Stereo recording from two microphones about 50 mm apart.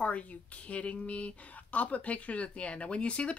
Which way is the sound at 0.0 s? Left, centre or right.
Left.